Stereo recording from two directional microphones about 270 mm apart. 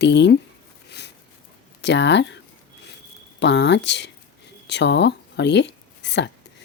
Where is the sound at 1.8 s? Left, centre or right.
Left.